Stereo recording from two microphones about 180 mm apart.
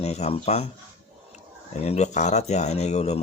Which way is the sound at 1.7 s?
35° left (ahead or behind).